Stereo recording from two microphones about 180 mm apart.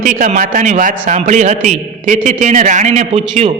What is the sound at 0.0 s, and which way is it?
A man's voice, 45° right (ahead or behind).